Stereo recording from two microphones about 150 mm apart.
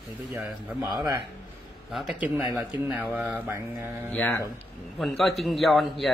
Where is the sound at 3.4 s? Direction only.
15° right (ahead or behind).